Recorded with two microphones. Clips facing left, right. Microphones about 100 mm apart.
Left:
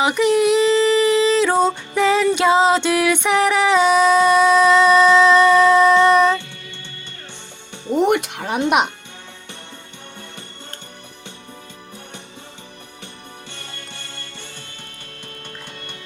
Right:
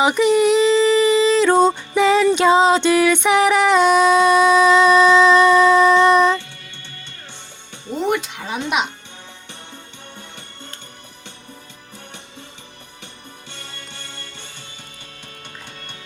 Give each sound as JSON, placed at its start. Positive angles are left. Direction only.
{"t": 0.0, "sound": "music", "side_deg": 0}
{"t": 7.9, "sound": "music", "side_deg": 60}